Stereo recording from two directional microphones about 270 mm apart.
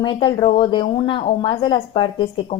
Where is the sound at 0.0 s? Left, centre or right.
Centre.